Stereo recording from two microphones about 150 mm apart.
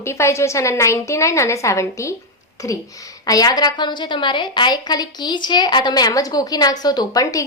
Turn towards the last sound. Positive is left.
turn(degrees=25)  # may be behind; listen again after turning